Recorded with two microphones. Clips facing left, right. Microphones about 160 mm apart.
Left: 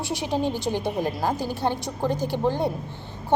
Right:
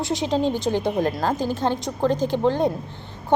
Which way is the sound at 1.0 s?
15° left (ahead or behind).